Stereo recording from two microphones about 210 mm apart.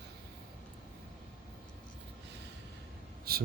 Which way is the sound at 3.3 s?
45° right (ahead or behind).